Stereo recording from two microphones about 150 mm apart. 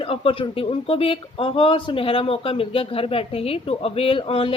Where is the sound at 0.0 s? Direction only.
40° left (ahead or behind).